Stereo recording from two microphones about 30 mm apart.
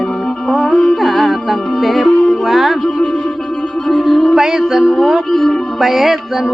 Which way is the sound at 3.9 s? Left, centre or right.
Centre.